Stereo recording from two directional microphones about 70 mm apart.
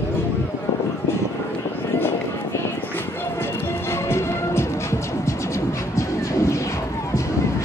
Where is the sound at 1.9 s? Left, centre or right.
Left.